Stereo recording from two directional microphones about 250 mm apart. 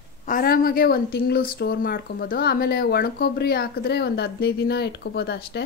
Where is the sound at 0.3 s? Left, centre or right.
Left.